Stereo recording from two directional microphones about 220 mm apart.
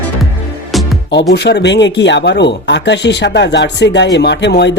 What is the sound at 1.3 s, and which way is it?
Speech, 50° left (ahead or behind).